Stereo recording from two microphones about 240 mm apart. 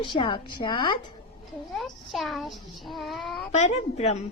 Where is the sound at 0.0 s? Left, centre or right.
Left.